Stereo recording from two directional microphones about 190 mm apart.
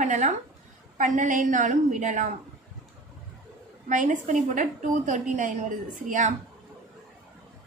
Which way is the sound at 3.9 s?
40° right (ahead or behind).